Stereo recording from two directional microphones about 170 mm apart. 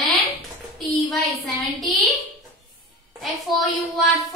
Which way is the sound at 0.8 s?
Centre (ahead or behind).